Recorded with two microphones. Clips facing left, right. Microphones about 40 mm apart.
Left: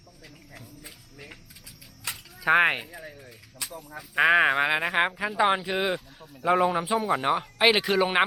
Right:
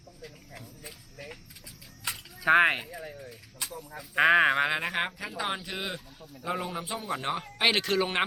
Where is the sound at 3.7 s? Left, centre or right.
Centre.